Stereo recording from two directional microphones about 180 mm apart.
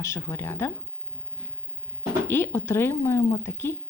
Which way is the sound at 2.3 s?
15° left (ahead or behind).